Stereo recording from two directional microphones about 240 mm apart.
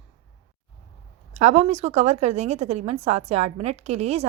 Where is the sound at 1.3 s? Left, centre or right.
Right.